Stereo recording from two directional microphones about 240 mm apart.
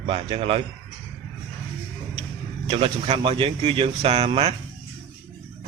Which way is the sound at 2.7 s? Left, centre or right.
Right.